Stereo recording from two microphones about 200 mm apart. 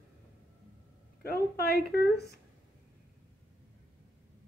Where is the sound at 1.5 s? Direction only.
50° left (ahead or behind).